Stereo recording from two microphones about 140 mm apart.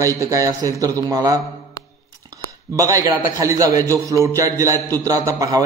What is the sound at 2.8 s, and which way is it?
A man's voice, 25° right (ahead or behind).